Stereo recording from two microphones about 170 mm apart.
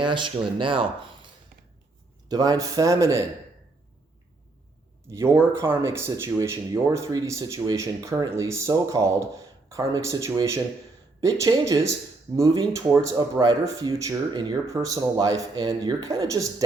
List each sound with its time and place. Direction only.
0.0 s speech: 30° right (ahead or behind)
2.3 s speech: 20° right (ahead or behind)
5.0 s speech: 15° right (ahead or behind)